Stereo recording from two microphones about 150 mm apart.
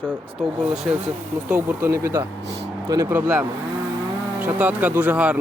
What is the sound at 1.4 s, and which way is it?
Speech, 15° right (ahead or behind).